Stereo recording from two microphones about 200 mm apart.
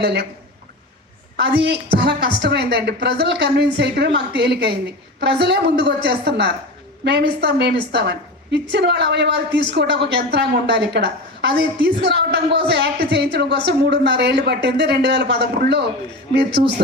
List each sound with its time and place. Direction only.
0.0 s speech: 55° right (ahead or behind)
1.4 s a woman's voice: 60° right (ahead or behind)